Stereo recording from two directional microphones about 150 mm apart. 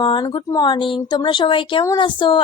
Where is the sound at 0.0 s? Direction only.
30° left (ahead or behind).